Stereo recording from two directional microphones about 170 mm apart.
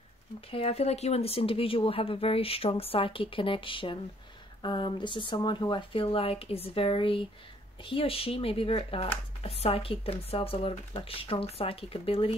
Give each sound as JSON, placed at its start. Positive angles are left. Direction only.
{"t": 0.5, "sound": "speech", "side_deg": 35}